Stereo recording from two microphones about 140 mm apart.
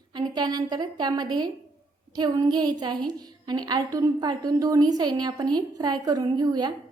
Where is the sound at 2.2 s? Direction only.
30° right (ahead or behind).